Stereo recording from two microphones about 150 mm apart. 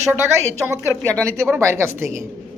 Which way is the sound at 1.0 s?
10° left (ahead or behind).